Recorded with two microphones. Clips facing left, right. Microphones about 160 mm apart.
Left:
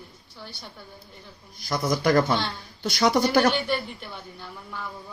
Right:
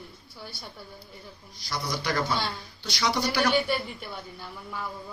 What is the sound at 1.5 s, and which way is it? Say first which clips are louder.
Speech: left 7 dB; 50° left (ahead or behind).